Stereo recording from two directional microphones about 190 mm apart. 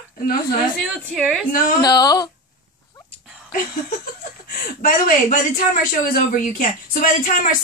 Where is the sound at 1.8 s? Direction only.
20° left (ahead or behind).